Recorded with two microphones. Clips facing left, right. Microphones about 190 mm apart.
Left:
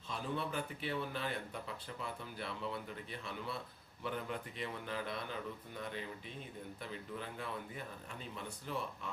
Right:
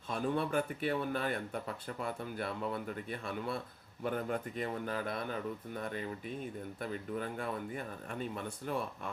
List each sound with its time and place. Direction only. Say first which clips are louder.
0.1 s speech: right 7 dB; 50° right (ahead or behind)